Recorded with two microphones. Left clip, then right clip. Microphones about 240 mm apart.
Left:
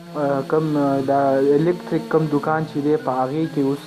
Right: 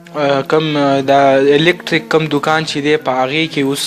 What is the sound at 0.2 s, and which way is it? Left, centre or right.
A man's voice, right.